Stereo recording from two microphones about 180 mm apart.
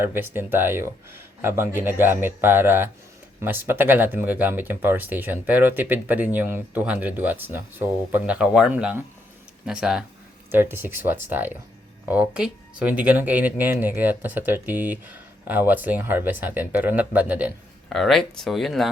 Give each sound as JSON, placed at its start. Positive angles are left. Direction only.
{"t": 0.0, "sound": "speech", "side_deg": -10}